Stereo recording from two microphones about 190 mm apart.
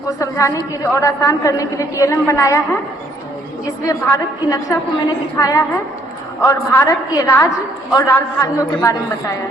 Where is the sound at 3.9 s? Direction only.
20° left (ahead or behind).